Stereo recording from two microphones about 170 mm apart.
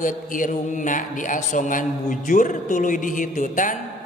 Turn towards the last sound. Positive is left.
turn(degrees=50)  # may be behind; listen again after turning